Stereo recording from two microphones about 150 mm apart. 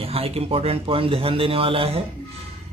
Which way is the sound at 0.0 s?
40° right (ahead or behind).